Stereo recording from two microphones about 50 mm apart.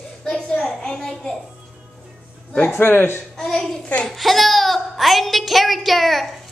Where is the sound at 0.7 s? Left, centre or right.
Centre.